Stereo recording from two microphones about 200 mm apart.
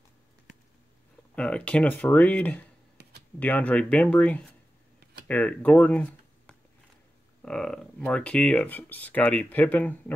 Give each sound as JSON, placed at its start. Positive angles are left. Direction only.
{"t": 1.3, "sound": "speech", "side_deg": 5}
{"t": 3.0, "sound": "a sound", "side_deg": -55}
{"t": 3.3, "sound": "speech", "side_deg": 10}